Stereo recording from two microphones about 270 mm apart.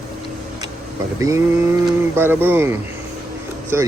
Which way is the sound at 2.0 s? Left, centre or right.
Centre.